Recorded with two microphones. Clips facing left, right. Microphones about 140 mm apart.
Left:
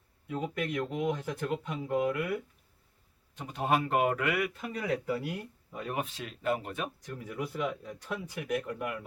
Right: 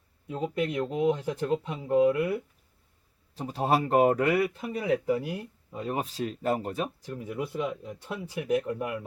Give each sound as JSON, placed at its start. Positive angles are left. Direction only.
{"t": 0.3, "sound": "speech", "side_deg": -30}
{"t": 7.9, "sound": "speech", "side_deg": -15}
{"t": 8.4, "sound": "speech", "side_deg": -25}